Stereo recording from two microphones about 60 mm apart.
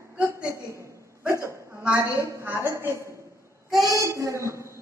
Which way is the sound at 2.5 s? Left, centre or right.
Right.